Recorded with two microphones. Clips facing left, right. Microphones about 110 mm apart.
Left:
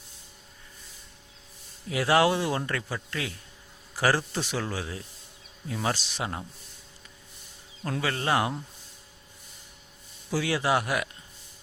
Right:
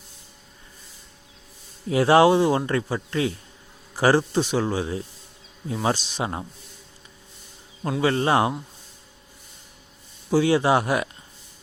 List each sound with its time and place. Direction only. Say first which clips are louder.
1.9 s speech: right 7 dB; 30° right (ahead or behind)
7.8 s speech: right 5 dB; 15° right (ahead or behind)
8.0 s speech: right 7 dB; 25° right (ahead or behind)
10.2 s speech: right 8 dB; 25° right (ahead or behind)